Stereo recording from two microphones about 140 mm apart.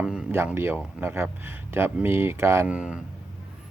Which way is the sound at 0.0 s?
5° right (ahead or behind).